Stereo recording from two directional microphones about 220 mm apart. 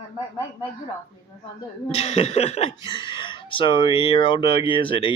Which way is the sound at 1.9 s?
30° left (ahead or behind).